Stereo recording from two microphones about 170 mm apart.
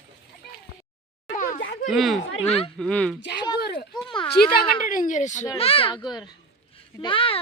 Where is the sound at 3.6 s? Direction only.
70° left (ahead or behind).